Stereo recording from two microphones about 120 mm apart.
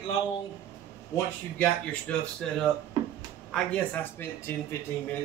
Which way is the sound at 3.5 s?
10° left (ahead or behind).